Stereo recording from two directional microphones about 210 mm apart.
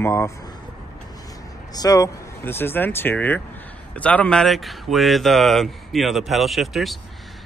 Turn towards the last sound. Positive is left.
turn(degrees=0)  # may be behind; listen again after turning